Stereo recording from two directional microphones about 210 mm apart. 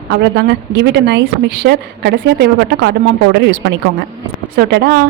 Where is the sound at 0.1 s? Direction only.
55° right (ahead or behind).